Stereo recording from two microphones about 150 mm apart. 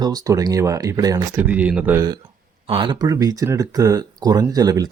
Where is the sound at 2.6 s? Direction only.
35° right (ahead or behind).